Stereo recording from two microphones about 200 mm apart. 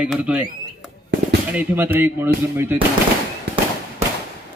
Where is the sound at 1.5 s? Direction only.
10° right (ahead or behind).